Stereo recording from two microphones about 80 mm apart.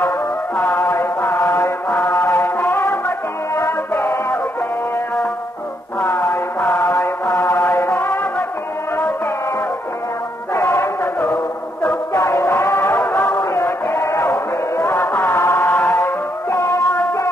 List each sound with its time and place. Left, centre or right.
0.6 s mantra: left
1.9 s music: left
5.9 s mantra: left
10.5 s music: left
12.1 s music: left
16.0 s music: left